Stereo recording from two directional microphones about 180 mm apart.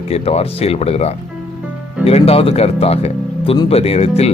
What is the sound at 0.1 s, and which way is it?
Speech, 35° left (ahead or behind).